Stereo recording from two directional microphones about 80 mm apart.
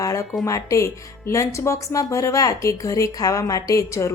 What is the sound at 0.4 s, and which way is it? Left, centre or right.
Speech, left.